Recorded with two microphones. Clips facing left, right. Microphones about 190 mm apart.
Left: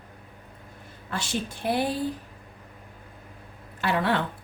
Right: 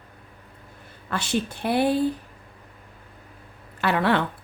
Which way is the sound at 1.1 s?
60° right (ahead or behind).